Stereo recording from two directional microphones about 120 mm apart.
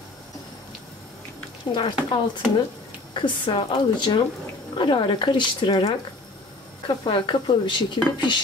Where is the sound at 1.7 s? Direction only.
40° left (ahead or behind).